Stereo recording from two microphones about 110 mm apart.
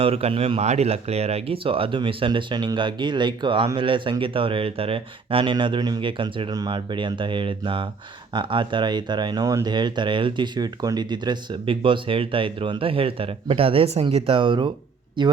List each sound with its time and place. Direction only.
0.0 s speech: 65° right (ahead or behind)
6.5 s speech: 40° right (ahead or behind); by 14.3 s 65° right (ahead or behind)
14.3 s speech: 50° right (ahead or behind)